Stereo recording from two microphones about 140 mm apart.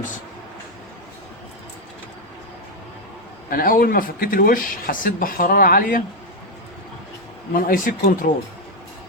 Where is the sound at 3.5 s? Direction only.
85° left.